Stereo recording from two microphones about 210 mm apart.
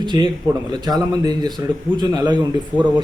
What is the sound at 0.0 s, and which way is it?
A man's voice, 20° right (ahead or behind).